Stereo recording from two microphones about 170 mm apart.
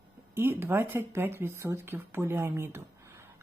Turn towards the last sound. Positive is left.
turn(degrees=-15)  # may be behind; listen again after turning